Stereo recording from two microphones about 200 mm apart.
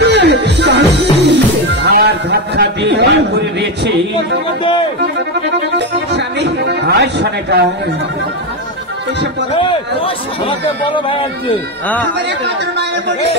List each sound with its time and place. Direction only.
0.0 s music: 60° right (ahead or behind)
5.8 s music: 60° right (ahead or behind)
9.5 s speech: 25° left (ahead or behind)
12.4 s speech: 60° right (ahead or behind)